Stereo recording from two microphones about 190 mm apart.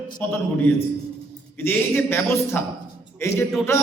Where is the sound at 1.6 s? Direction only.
10° left (ahead or behind).